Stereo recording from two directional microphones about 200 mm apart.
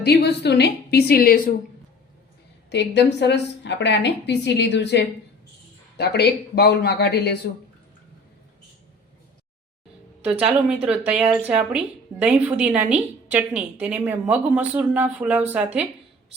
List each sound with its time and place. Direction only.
0.0 s a woman's voice: 55° left (ahead or behind)
2.6 s a woman's voice: 60° left (ahead or behind)
10.4 s a woman's voice: 5° right (ahead or behind)